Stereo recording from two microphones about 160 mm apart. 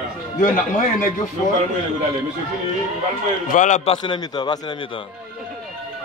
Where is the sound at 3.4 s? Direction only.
50° left (ahead or behind).